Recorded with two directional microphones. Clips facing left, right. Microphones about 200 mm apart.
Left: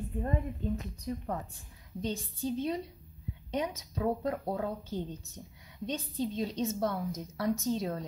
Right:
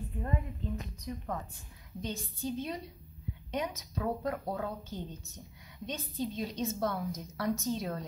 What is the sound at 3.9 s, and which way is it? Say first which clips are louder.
A woman's voice: left 3 dB; 25° left (ahead or behind).